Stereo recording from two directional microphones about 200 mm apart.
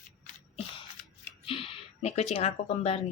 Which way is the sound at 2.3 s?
30° left (ahead or behind).